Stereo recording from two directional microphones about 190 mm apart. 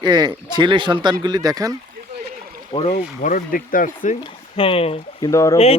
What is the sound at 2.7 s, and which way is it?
Speech, 30° left (ahead or behind).